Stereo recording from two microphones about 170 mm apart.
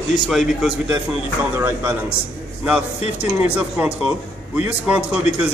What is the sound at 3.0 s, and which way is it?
Speech, 35° left (ahead or behind).